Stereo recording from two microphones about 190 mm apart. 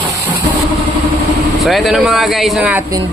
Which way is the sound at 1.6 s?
Centre (ahead or behind).